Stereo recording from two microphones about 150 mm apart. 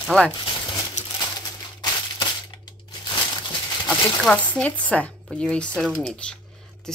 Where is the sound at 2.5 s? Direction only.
25° left (ahead or behind).